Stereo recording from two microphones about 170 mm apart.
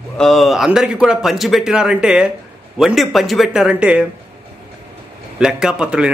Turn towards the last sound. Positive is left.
turn(degrees=-5)  # may be behind; listen again after turning